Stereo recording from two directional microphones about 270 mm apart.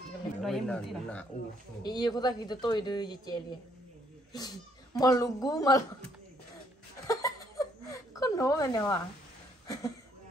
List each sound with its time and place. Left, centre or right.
0.4 s speech: centre
1.8 s speech: centre
7.1 s chuckle: centre
9.7 s a sound: centre